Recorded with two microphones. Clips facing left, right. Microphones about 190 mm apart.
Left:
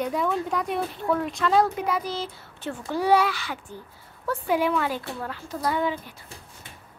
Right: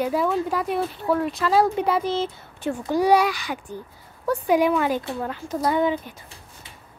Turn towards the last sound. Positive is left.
turn(degrees=-20)  # may be behind; listen again after turning